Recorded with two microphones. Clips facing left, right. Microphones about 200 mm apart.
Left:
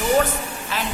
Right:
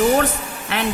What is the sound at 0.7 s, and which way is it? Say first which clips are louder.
Speech: right 5 dB; 65° right (ahead or behind).